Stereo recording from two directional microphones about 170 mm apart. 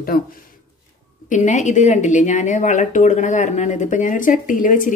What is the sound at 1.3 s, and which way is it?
Speech, 45° left (ahead or behind).